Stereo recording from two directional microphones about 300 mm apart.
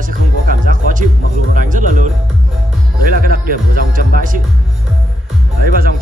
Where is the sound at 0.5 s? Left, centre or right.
Right.